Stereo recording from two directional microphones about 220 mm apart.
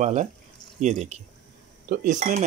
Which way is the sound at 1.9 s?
35° right (ahead or behind).